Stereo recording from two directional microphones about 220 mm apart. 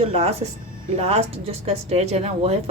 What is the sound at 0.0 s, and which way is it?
A woman's voice, 30° right (ahead or behind).